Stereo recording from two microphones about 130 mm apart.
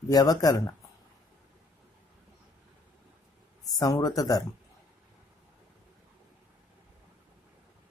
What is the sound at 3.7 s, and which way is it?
Speech, 30° left (ahead or behind).